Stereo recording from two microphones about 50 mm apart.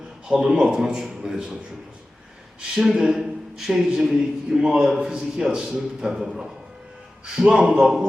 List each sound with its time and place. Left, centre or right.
0.3 s a man's voice: centre
2.6 s a man's voice: centre
7.8 s speech: centre